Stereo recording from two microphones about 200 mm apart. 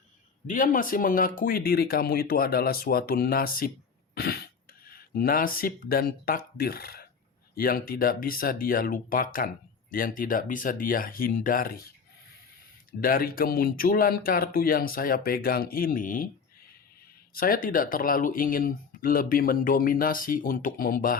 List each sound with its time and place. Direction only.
0.4 s speech: 40° left (ahead or behind)
4.1 s cough: 50° left (ahead or behind)
4.9 s speech: 50° left (ahead or behind)
13.0 s speech: 50° left (ahead or behind)
17.3 s speech: 45° left (ahead or behind)